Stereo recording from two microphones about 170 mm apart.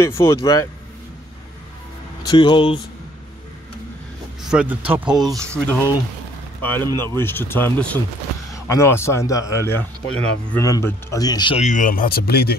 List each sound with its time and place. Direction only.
0.2 s speech: 20° left (ahead or behind)
2.2 s speech: 30° left (ahead or behind)
4.4 s speech: 5° right (ahead or behind)
5.2 s speech: 20° right (ahead or behind)
6.6 s speech: 10° left (ahead or behind)
11.5 s speech: 45° left (ahead or behind); by 12.5 s 65° left (ahead or behind)